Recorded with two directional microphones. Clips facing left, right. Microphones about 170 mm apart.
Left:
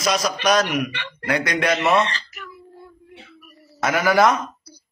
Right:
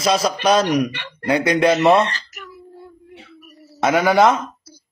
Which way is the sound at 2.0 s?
45° right (ahead or behind).